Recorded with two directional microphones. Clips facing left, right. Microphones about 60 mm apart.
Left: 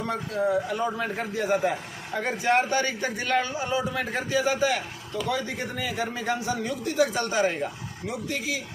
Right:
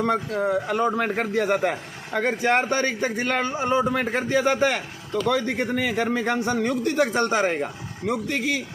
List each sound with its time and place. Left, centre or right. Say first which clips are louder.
0.0 s a man's voice: right 4 dB; right
2.1 s a man's voice: right 2 dB; right
8.0 s a man's voice: right 6 dB; right